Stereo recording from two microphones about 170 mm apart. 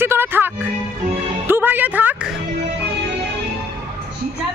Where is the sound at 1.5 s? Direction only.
10° right (ahead or behind).